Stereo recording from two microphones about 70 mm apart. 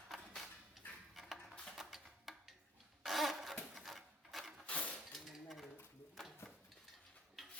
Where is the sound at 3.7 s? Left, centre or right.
Centre.